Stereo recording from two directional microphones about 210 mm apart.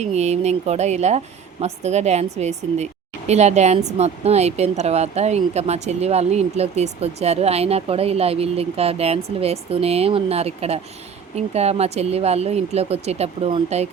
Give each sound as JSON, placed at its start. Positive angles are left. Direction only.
{"t": 0.0, "sound": "a woman's voice", "side_deg": -30}